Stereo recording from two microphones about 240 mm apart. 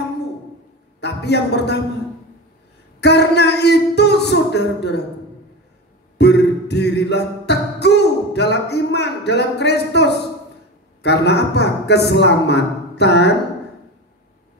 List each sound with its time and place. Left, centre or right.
1.0 s a man's voice: left
3.0 s a man's voice: left
6.1 s music: left
11.0 s a man's voice: left